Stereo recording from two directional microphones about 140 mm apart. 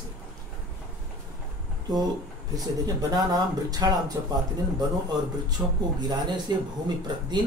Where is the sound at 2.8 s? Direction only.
25° right (ahead or behind).